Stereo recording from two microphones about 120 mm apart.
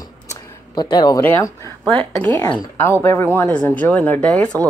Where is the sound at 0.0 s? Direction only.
35° left (ahead or behind).